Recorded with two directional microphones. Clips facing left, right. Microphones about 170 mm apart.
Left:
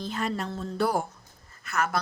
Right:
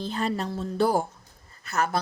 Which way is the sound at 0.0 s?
30° right (ahead or behind).